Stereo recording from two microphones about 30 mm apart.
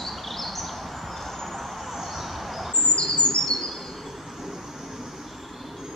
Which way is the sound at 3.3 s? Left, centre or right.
Left.